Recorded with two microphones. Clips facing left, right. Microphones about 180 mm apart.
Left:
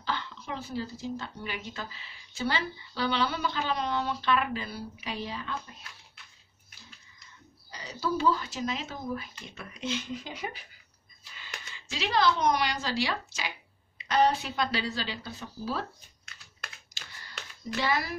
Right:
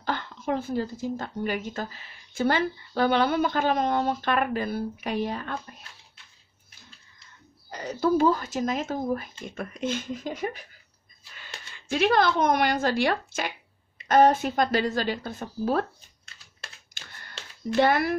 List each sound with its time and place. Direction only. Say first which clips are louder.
0.0 s speech: right 5 dB; 50° right (ahead or behind)
7.7 s speech: right 8 dB; 50° right (ahead or behind)
11.7 s speech: right 7 dB; 55° right (ahead or behind)
16.9 s typewriter: right 1 dB; 55° right (ahead or behind)
17.7 s speech: right 8 dB; 55° right (ahead or behind)